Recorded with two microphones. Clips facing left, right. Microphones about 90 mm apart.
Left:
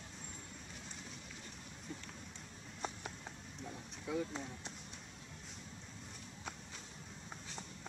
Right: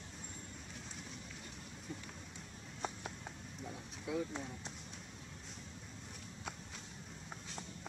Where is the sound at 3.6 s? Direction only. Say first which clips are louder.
Right 1 dB; 5° right (ahead or behind).